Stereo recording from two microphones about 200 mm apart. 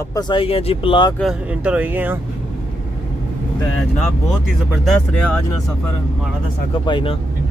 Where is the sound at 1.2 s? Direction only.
5° right (ahead or behind).